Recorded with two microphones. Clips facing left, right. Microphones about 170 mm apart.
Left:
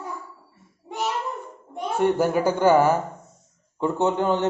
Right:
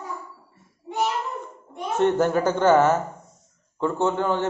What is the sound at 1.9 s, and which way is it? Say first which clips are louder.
Speech: right 1 dB; 10° left (ahead or behind).